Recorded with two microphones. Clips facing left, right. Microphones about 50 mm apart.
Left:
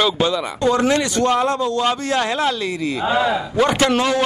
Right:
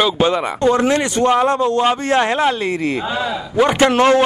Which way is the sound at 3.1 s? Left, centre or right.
Left.